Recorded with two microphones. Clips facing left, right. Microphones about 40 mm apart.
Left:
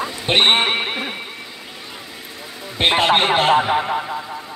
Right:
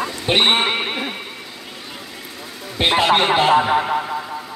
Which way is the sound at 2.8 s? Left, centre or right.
Left.